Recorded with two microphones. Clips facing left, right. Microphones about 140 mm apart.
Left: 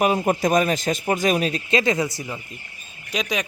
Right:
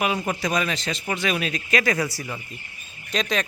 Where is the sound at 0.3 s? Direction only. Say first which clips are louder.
Left 6 dB; 45° left (ahead or behind).